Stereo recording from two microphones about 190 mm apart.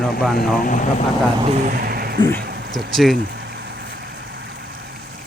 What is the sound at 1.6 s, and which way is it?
Speech, 50° right (ahead or behind).